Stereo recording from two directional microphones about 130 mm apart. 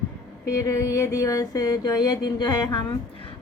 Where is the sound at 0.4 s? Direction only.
25° left (ahead or behind).